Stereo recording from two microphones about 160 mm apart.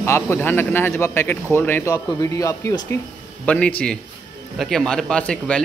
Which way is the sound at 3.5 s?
10° left (ahead or behind).